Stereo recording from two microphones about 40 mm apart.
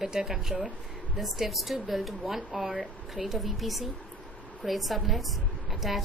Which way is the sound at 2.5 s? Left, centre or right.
Right.